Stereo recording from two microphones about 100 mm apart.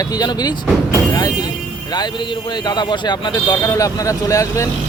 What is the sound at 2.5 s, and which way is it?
Speech, 45° left (ahead or behind).